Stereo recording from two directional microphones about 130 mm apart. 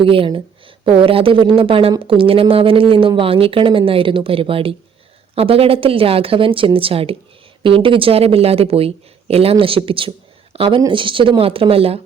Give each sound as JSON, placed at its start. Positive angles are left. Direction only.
{"t": 0.0, "sound": "speech", "side_deg": -45}
{"t": 10.8, "sound": "speech", "side_deg": -35}